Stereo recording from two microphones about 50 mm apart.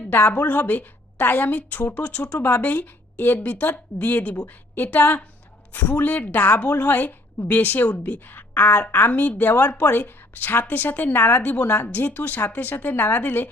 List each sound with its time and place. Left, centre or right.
0.1 s a woman's voice: left
10.1 s a woman's voice: left